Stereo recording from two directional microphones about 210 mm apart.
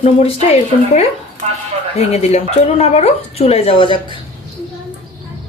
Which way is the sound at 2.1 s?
30° left (ahead or behind).